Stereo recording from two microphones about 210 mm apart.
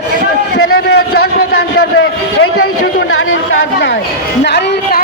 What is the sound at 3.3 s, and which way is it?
Speech, 70° left (ahead or behind).